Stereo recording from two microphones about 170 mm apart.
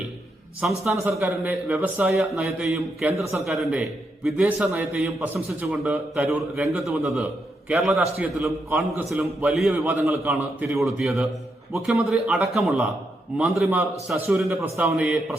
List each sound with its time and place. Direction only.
0.6 s a man's voice: 10° right (ahead or behind)
9.9 s a man's voice: 15° right (ahead or behind)
10.2 s a man's voice: 5° right (ahead or behind)